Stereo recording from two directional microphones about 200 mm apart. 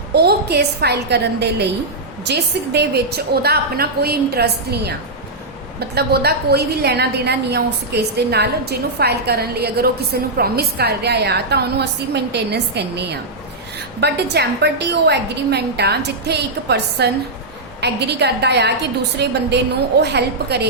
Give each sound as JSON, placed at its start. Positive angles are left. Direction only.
{"t": 0.1, "sound": "a woman's voice", "side_deg": -55}